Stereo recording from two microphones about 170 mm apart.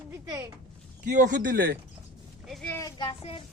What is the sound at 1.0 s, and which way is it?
Speech, 45° right (ahead or behind).